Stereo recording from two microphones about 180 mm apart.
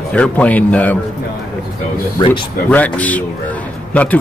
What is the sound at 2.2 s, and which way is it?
Speech, 25° left (ahead or behind).